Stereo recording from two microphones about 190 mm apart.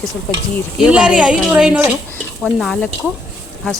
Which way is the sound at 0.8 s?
5° right (ahead or behind).